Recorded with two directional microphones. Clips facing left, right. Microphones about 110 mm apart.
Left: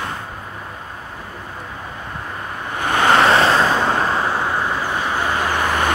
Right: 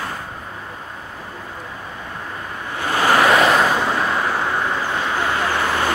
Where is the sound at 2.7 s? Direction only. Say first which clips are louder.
Left 2 dB; 20° left (ahead or behind).